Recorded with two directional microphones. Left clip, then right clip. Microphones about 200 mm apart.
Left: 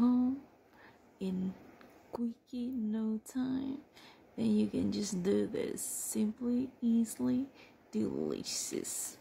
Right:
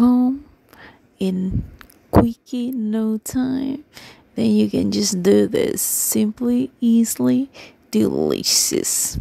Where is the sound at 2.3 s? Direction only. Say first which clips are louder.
Right 15 dB; 45° right (ahead or behind).